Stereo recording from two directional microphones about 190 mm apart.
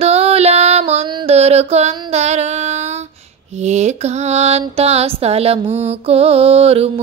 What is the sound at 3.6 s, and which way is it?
Mantra, 35° right (ahead or behind).